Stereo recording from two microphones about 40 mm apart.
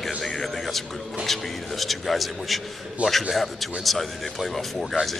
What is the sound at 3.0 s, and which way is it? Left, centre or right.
Speech, right.